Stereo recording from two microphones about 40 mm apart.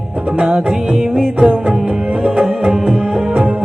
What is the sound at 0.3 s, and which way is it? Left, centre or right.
Music, centre.